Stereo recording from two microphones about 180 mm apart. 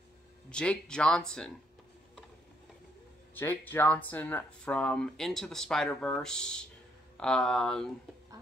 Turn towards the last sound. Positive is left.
turn(degrees=5)  # may be behind; listen again after turning